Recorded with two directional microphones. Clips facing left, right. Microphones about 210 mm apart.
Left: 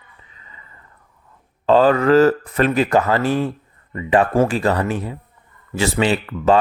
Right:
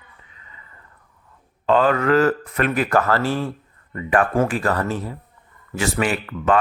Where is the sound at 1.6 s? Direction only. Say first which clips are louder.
Left 4 dB; 30° left (ahead or behind); by 5.1 s 15° left (ahead or behind).